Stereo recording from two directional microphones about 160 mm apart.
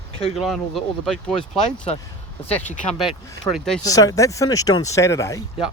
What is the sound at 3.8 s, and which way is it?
Speech, 20° left (ahead or behind).